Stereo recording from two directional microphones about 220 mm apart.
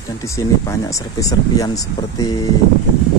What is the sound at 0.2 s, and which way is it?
Speech, 15° left (ahead or behind).